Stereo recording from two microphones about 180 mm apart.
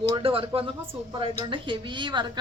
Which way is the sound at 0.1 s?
30° right (ahead or behind).